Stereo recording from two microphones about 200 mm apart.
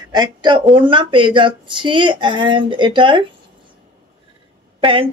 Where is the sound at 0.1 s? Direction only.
20° right (ahead or behind).